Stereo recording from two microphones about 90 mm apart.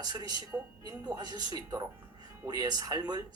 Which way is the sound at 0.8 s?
50° right (ahead or behind).